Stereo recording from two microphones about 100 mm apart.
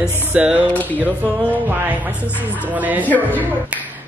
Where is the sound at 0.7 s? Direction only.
15° left (ahead or behind).